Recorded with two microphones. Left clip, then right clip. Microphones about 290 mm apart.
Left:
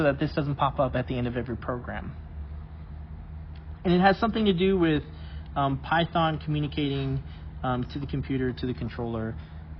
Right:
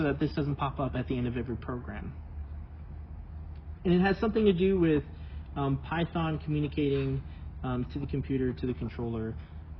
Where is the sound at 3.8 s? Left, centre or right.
Left.